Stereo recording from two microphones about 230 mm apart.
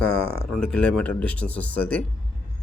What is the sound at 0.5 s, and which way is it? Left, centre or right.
Speech, centre.